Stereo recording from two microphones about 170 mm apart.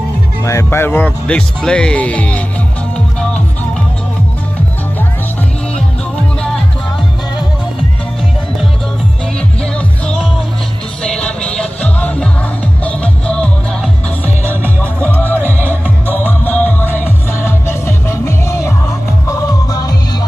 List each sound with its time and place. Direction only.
0.4 s speech: 15° left (ahead or behind)
9.6 s music: 5° left (ahead or behind); by 19.9 s 20° left (ahead or behind)